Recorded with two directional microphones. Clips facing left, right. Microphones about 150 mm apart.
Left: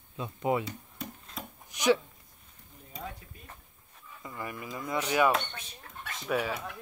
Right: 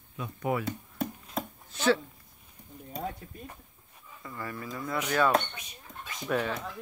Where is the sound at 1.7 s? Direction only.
15° left (ahead or behind).